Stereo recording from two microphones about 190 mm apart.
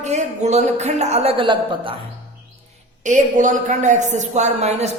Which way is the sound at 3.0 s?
40° right (ahead or behind).